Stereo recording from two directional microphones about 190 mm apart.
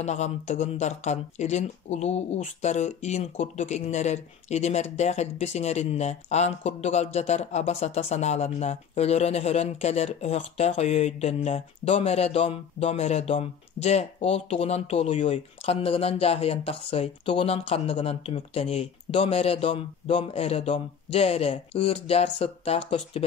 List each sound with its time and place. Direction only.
0.0 s speech: 35° left (ahead or behind)